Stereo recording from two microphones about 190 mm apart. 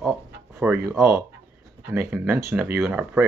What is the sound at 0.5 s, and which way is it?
Speech, 10° right (ahead or behind).